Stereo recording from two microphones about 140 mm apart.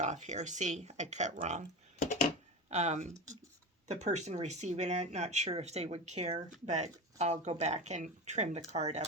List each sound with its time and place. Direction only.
0.0 s speech: 55° right (ahead or behind)
2.6 s speech: 55° right (ahead or behind)